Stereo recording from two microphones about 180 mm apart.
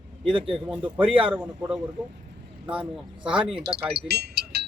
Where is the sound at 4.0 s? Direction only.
65° right (ahead or behind).